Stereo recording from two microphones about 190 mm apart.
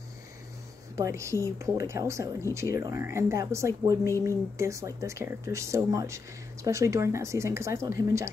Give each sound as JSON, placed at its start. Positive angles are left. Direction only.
{"t": 0.9, "sound": "speech", "side_deg": -15}